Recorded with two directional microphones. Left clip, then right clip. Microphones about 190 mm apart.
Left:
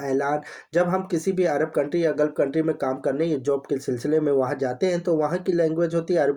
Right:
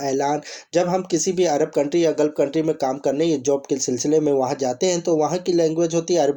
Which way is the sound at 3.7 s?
40° right (ahead or behind).